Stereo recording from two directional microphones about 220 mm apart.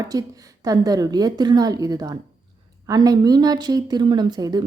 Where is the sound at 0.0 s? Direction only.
15° right (ahead or behind).